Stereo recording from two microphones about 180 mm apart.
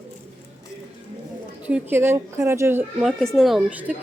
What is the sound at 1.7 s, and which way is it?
A woman's voice, 10° right (ahead or behind).